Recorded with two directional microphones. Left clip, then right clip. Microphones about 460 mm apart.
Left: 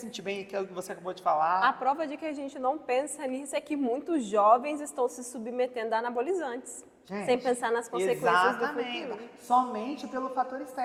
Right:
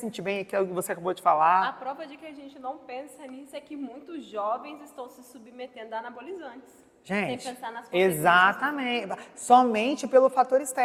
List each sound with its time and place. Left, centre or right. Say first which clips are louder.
0.2 s speech: right 6 dB; right
1.6 s a woman's voice: left 5 dB; centre
7.9 s a woman's voice: right 7 dB; right